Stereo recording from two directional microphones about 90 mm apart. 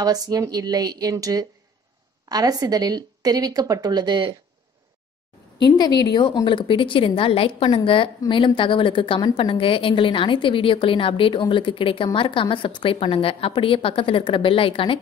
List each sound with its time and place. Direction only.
0.0 s a woman's voice: 45° right (ahead or behind)
5.8 s a woman's voice: 50° left (ahead or behind); by 15.0 s 80° left